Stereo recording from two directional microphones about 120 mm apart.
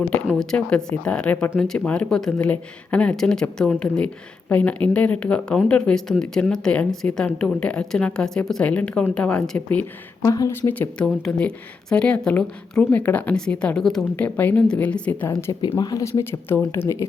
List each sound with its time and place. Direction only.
0.3 s speech: 5° left (ahead or behind)
10.2 s speech: 30° left (ahead or behind)
10.6 s speech: 15° left (ahead or behind)
14.3 s speech: 15° left (ahead or behind)
15.3 s speech: 20° left (ahead or behind)